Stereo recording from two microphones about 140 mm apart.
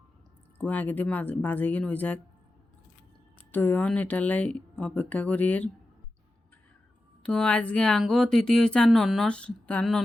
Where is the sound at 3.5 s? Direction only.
15° left (ahead or behind).